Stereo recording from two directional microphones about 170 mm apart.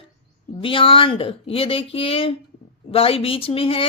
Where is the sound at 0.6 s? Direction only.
30° left (ahead or behind).